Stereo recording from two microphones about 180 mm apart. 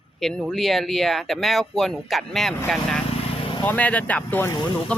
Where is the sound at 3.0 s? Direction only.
30° left (ahead or behind).